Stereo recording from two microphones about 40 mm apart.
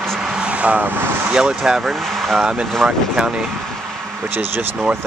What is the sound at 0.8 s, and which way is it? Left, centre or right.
Speech, right.